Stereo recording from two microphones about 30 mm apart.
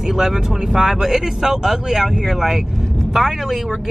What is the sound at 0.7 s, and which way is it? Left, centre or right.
Speech, right.